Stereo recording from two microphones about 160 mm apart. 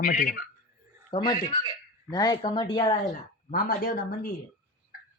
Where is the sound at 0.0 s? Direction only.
65° left (ahead or behind).